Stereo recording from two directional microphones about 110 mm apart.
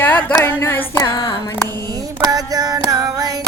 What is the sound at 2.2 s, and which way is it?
Female singing, 35° right (ahead or behind).